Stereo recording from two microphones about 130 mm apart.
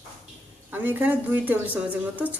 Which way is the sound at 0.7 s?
15° right (ahead or behind).